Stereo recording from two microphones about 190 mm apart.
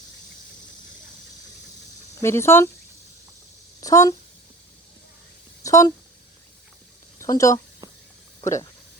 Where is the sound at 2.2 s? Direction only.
15° left (ahead or behind).